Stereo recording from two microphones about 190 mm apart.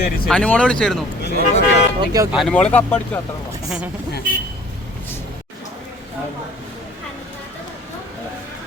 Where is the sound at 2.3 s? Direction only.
5° left (ahead or behind).